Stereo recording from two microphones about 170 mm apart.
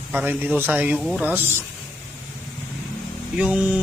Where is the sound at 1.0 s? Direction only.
Centre (ahead or behind).